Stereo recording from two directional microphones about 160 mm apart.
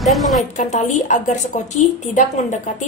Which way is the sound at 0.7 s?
50° left (ahead or behind).